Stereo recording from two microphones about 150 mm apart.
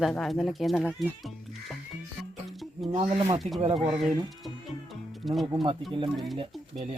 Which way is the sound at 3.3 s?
40° right (ahead or behind).